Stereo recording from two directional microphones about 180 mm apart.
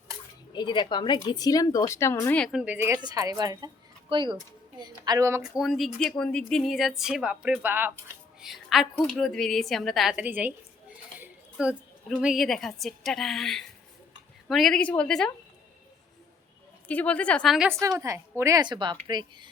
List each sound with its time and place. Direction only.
0.5 s a woman's voice: 25° left (ahead or behind); by 5.4 s 20° right (ahead or behind)
5.4 s a woman's voice: centre (ahead or behind)
16.9 s speech: 10° left (ahead or behind)
17.7 s a woman's voice: 15° right (ahead or behind)